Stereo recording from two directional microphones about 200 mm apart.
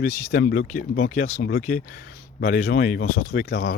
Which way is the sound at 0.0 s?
45° left (ahead or behind).